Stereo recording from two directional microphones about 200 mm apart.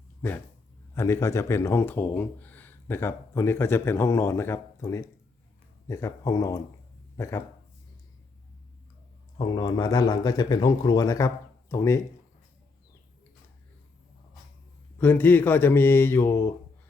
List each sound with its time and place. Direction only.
0.9 s speech: 15° left (ahead or behind)
9.4 s speech: 20° left (ahead or behind)
14.9 s speech: 10° left (ahead or behind)